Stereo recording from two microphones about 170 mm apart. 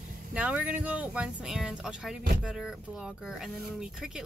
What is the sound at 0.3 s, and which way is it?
Speech, 10° right (ahead or behind).